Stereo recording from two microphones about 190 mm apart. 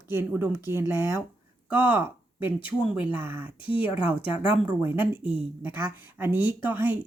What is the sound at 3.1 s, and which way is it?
Speech, 10° right (ahead or behind).